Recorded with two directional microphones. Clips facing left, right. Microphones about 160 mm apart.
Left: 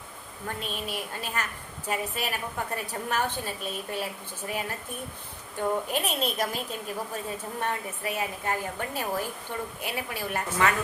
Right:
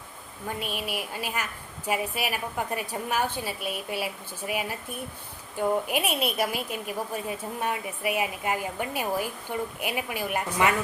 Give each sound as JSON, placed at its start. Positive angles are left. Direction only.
{"t": 0.4, "sound": "a woman's voice", "side_deg": -10}